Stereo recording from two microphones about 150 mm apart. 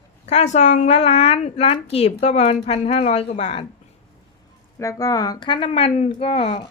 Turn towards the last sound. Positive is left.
turn(degrees=40)  # may be behind; listen again after turning